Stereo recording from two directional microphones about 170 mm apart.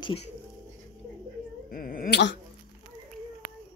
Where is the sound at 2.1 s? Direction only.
90° left.